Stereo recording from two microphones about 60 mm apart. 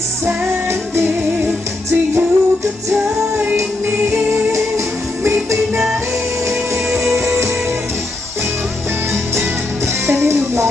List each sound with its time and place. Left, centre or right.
1.9 s music: right
3.8 s music: right
7.0 s music: right
9.1 s music: right